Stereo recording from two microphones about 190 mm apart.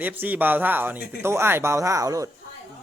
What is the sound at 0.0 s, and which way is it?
Speech, 10° right (ahead or behind).